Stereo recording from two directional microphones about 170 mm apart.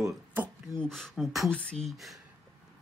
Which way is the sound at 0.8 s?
5° left (ahead or behind).